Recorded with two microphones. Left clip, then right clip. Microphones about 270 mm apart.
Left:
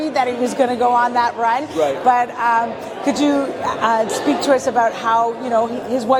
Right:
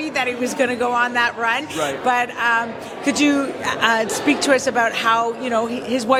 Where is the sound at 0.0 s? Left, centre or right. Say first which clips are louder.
Left 3 dB; centre.